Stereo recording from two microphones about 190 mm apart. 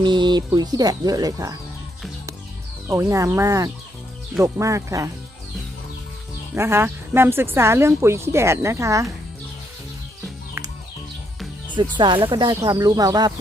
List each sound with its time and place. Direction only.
0.0 s speech: 25° right (ahead or behind)
2.8 s a woman's voice: 15° right (ahead or behind)
6.5 s a woman's voice: 10° right (ahead or behind)
11.7 s speech: 25° right (ahead or behind)